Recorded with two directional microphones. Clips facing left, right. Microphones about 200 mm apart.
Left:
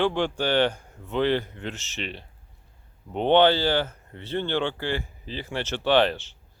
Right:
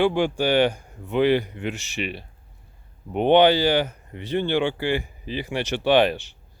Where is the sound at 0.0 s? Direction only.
10° right (ahead or behind).